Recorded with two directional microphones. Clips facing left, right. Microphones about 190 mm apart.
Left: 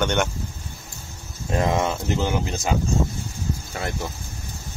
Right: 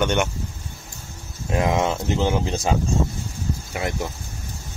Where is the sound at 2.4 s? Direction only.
30° right (ahead or behind).